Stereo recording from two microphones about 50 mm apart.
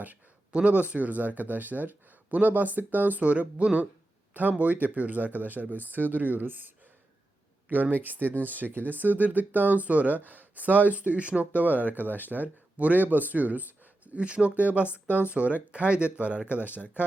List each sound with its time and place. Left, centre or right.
0.0 s speech: right